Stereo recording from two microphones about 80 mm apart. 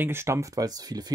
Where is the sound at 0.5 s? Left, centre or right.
Right.